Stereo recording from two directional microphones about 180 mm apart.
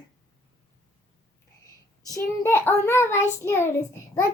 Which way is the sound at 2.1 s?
15° left (ahead or behind).